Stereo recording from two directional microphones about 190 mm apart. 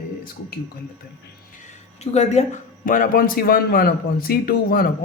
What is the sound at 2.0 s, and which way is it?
Speech, 35° left (ahead or behind).